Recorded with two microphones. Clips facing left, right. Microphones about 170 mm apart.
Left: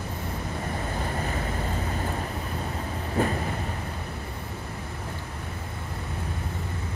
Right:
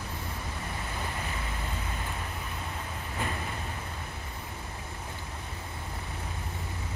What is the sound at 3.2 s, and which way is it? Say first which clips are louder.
Train: left 10 dB; 40° left (ahead or behind).